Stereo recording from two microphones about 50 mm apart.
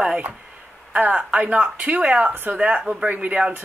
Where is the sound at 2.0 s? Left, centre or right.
Right.